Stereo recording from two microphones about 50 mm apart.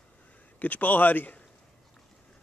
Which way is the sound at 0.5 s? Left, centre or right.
Left.